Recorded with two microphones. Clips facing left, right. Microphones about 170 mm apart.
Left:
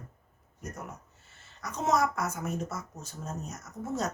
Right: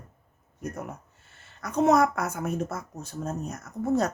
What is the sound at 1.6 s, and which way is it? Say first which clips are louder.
A woman's voice: right 7 dB; 55° right (ahead or behind).